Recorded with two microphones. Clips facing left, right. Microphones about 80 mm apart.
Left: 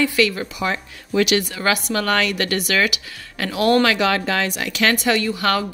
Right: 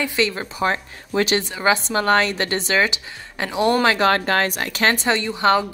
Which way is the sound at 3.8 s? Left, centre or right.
Right.